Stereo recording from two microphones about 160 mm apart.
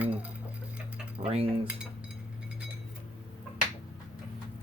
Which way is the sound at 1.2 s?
40° right (ahead or behind).